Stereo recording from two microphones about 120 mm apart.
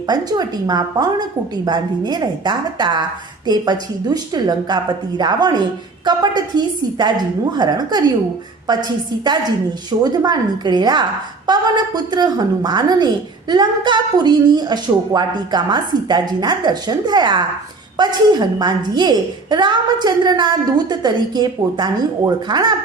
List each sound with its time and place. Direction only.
0.1 s a woman's voice: 35° right (ahead or behind)